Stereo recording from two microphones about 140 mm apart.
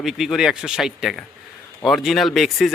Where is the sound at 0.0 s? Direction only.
Centre (ahead or behind).